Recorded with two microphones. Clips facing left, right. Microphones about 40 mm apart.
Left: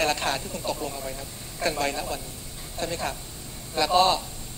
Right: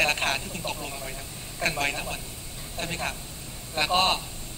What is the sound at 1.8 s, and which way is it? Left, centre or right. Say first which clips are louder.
A man's voice: left 1 dB; right.